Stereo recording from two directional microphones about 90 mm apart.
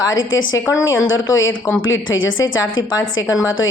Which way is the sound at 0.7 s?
35° left (ahead or behind).